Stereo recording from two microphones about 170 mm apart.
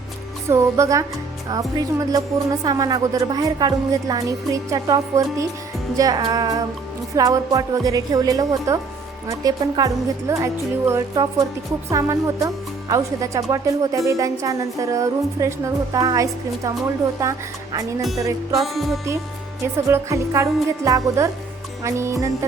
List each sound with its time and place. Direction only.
0.5 s speech: 15° right (ahead or behind)
18.6 s music: centre (ahead or behind)
19.9 s speech: 15° right (ahead or behind)